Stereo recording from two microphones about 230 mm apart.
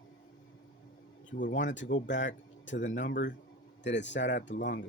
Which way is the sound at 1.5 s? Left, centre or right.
Left.